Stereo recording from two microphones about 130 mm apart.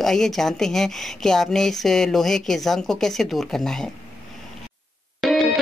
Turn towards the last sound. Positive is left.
turn(degrees=0)  # may be behind; listen again after turning